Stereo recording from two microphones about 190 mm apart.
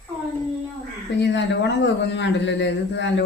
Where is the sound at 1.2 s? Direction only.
65° left (ahead or behind).